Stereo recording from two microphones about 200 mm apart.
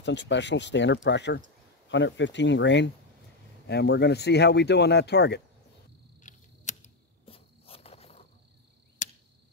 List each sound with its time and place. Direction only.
0.0 s speech: 60° left (ahead or behind)
6.2 s cricket: 35° left (ahead or behind)